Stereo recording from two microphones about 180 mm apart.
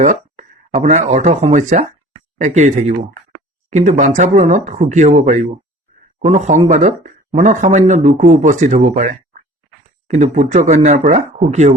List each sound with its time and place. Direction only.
0.0 s speech: 40° right (ahead or behind)